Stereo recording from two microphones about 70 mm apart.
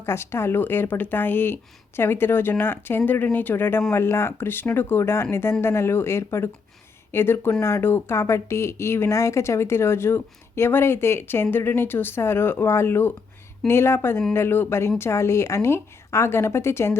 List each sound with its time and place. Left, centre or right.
0.0 s speech: left